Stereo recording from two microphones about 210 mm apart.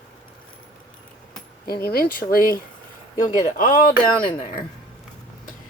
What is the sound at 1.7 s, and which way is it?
Speech, 45° left (ahead or behind).